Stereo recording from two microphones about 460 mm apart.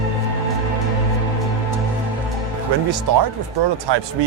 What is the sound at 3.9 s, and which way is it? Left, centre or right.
Speech, right.